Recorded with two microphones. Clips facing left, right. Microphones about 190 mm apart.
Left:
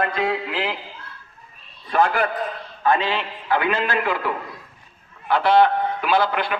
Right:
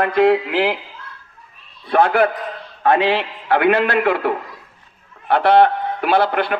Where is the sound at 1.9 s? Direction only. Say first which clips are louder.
Right 5 dB; 60° right (ahead or behind).